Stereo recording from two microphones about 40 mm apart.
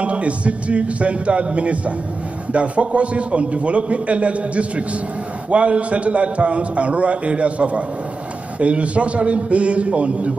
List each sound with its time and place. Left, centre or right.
0.0 s a man's voice: right